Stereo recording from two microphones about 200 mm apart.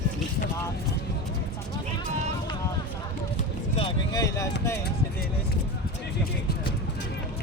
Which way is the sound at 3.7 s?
20° left (ahead or behind).